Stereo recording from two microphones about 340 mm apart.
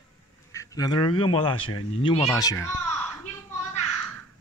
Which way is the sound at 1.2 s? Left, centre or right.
Centre.